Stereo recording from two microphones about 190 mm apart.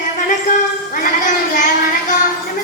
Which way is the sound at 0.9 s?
45° left (ahead or behind).